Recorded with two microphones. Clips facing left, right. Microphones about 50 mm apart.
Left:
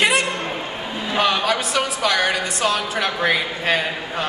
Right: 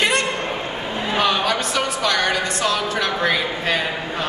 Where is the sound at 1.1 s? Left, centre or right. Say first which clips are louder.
Left 1 dB; centre.